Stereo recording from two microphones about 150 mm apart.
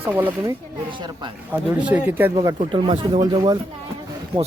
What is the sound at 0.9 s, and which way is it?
Speech, 30° right (ahead or behind).